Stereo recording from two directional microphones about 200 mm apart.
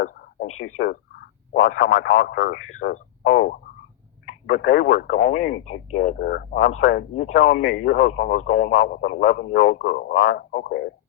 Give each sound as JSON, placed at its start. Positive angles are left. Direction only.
{"t": 0.0, "sound": "a sound", "side_deg": 45}
{"t": 0.8, "sound": "speech", "side_deg": 50}
{"t": 2.9, "sound": "speech", "side_deg": 40}
{"t": 6.1, "sound": "speech", "side_deg": 50}
{"t": 7.6, "sound": "speech", "side_deg": 75}
{"t": 7.9, "sound": "speech", "side_deg": 40}